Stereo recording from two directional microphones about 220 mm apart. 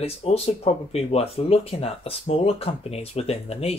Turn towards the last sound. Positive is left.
turn(degrees=25)  # may be behind; listen again after turning